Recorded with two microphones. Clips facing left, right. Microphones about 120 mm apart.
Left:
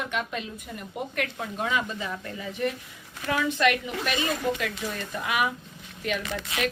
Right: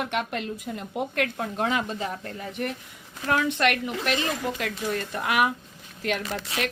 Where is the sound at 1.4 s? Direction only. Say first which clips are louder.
Even; 65° right (ahead or behind).